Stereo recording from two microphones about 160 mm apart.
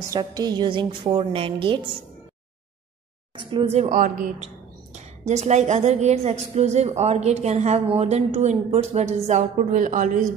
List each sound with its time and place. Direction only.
0.1 s a woman's voice: 25° right (ahead or behind)
3.5 s a woman's voice: 40° right (ahead or behind)
4.9 s a woman's voice: 45° right (ahead or behind)